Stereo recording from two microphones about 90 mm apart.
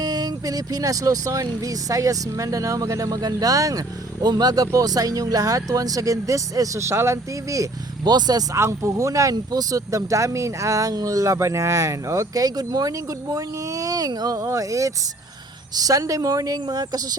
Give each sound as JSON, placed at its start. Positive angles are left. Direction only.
{"t": 0.0, "sound": "speech", "side_deg": -45}
{"t": 8.5, "sound": "speech", "side_deg": -30}
{"t": 9.3, "sound": "speech", "side_deg": -45}